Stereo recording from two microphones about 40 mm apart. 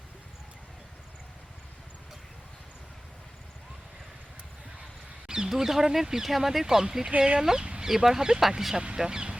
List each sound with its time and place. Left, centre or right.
5.3 s speech: centre
7.6 s chicken: right
7.9 s speech: centre
9.0 s a sound: centre